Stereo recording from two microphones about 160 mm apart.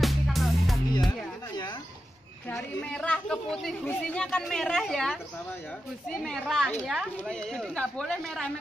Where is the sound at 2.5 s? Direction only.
5° left (ahead or behind).